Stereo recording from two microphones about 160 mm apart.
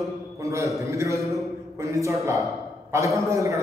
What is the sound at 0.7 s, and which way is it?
A woman's voice, 20° right (ahead or behind).